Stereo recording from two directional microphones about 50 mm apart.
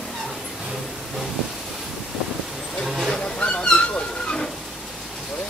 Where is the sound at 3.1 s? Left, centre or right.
Centre.